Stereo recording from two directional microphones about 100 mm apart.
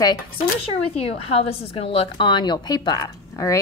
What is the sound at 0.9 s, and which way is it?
A woman's voice, 85° left.